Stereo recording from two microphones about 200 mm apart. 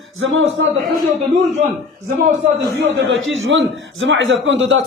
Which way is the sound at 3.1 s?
75° right (ahead or behind).